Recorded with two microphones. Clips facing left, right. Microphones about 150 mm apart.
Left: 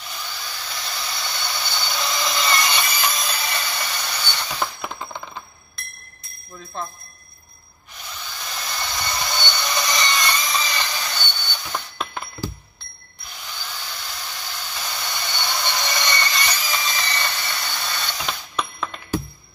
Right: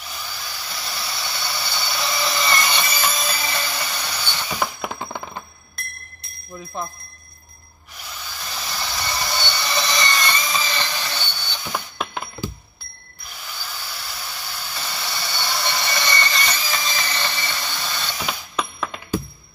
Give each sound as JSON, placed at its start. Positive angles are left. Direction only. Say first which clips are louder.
{"t": 0.1, "sound": "a sound", "louder": "even", "side_deg": -10}
{"t": 5.1, "sound": "alarm clock", "louder": "right 3 dB", "side_deg": -55}
{"t": 6.5, "sound": "speech", "louder": "right 2 dB", "side_deg": -15}
{"t": 8.0, "sound": "wood", "louder": "even", "side_deg": -5}
{"t": 9.8, "sound": "a sound", "louder": "even", "side_deg": 0}
{"t": 13.5, "sound": "hair dryer", "louder": "even", "side_deg": -5}